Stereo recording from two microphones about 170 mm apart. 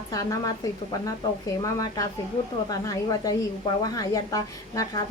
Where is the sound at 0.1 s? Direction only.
20° left (ahead or behind).